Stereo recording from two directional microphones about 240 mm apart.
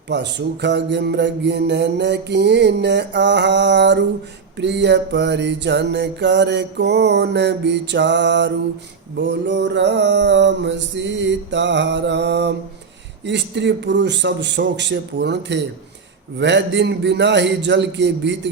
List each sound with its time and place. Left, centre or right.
0.1 s music: right